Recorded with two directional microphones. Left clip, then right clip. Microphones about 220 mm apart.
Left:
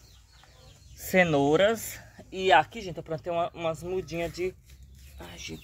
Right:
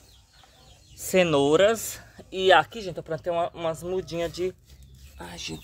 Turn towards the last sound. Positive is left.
turn(degrees=-25)  # may be behind; listen again after turning